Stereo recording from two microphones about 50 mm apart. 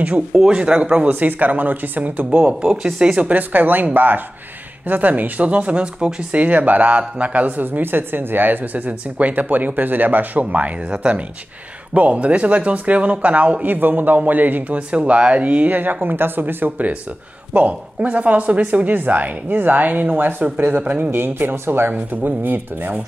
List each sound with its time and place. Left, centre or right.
0.5 s speech: right
2.6 s speech: centre
3.2 s speech: right
14.9 s speech: right
15.7 s speech: right
17.5 s speech: right
21.1 s speech: right